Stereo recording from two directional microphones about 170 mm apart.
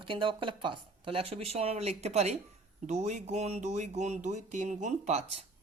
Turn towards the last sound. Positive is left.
turn(degrees=-40)  # may be behind; listen again after turning